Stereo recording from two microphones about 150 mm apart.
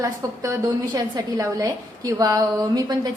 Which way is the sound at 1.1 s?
25° right (ahead or behind).